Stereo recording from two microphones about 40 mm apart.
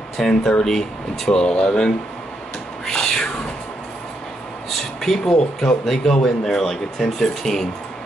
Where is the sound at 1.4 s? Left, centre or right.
Left.